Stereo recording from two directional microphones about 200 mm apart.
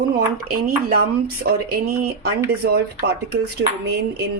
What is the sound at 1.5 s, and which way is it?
Speech, 50° right (ahead or behind).